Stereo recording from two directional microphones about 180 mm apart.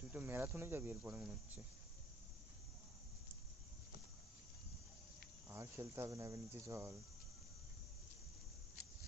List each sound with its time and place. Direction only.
0.1 s speech: 10° right (ahead or behind)
5.5 s speech: 15° right (ahead or behind)